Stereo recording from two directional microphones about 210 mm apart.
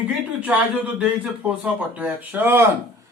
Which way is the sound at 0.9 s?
5° right (ahead or behind).